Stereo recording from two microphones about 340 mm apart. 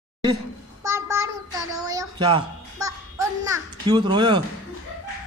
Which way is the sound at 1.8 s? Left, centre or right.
Centre.